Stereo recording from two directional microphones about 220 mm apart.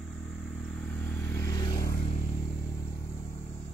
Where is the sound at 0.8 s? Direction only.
5° left (ahead or behind).